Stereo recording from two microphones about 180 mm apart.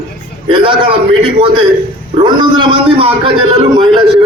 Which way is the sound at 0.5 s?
30° right (ahead or behind).